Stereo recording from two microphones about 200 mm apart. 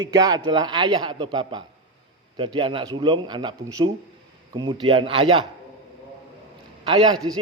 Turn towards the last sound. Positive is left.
turn(degrees=-25)  # may be behind; listen again after turning